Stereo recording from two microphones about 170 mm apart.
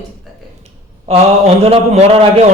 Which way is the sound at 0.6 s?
40° right (ahead or behind).